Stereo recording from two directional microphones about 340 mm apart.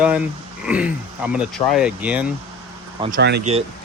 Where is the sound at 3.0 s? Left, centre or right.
Right.